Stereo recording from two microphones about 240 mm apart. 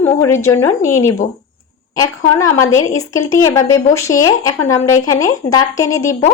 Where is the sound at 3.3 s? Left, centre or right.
Centre.